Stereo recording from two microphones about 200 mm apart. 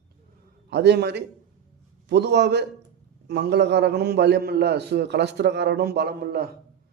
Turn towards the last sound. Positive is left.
turn(degrees=-50)  # may be behind; listen again after turning